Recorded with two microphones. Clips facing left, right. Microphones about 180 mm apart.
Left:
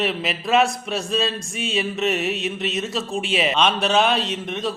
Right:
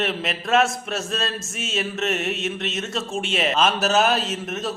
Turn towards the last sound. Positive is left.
turn(degrees=-5)  # may be behind; listen again after turning